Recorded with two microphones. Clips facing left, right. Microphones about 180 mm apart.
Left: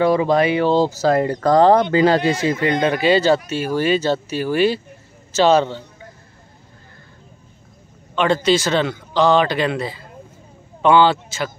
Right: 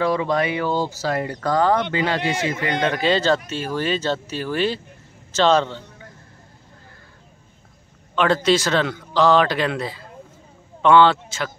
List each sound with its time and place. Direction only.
0.0 s speech: 25° left (ahead or behind)
0.8 s speech: 40° left (ahead or behind)
2.9 s speech: 10° left (ahead or behind)
8.1 s a man's voice: centre (ahead or behind)